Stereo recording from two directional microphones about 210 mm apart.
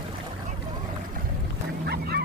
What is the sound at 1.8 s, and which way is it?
Goose, 50° right (ahead or behind).